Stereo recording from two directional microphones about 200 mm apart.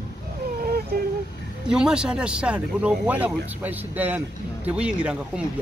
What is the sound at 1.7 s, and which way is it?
Speech, 5° right (ahead or behind).